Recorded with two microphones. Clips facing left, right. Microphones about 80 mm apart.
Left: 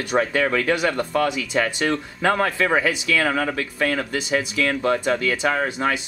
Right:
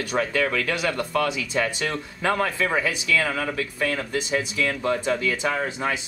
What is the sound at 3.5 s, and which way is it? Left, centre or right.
Speech, left.